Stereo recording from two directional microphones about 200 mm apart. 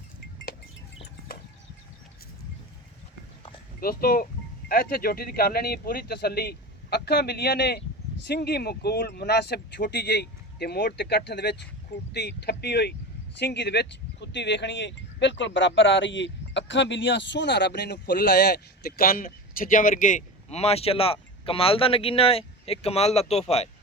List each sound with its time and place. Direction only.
3.8 s speech: 50° left (ahead or behind); by 23.6 s 30° left (ahead or behind)